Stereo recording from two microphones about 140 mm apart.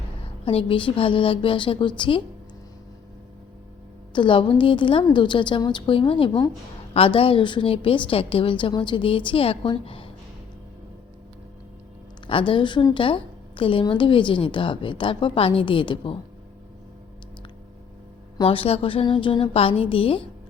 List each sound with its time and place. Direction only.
0.4 s a woman's voice: 40° left (ahead or behind)
4.1 s a woman's voice: 35° left (ahead or behind)
12.3 s a woman's voice: 35° left (ahead or behind)
18.4 s a woman's voice: 40° left (ahead or behind)